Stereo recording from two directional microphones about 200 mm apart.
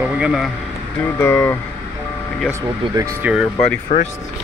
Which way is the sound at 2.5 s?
15° right (ahead or behind).